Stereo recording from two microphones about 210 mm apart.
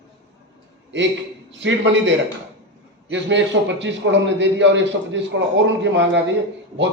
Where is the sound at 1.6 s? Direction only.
60° right (ahead or behind).